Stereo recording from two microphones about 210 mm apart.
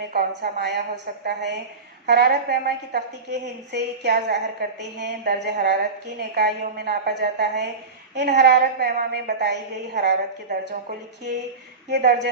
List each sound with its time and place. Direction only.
0.1 s a woman's voice: 45° right (ahead or behind)